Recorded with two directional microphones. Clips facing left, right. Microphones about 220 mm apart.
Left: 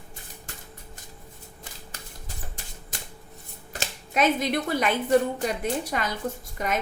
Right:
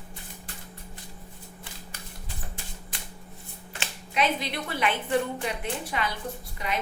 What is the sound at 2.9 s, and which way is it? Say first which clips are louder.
Shuffling cards: left 5 dB; 45° left (ahead or behind).